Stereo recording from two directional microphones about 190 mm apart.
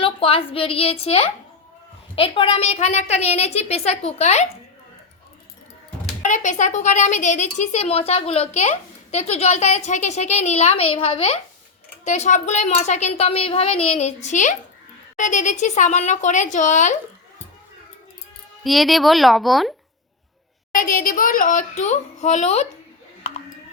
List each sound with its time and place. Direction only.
0.0 s speech: 30° left (ahead or behind)
6.2 s speech: 40° left (ahead or behind)
18.6 s speech: centre (ahead or behind)
20.7 s a child's voice: 50° left (ahead or behind)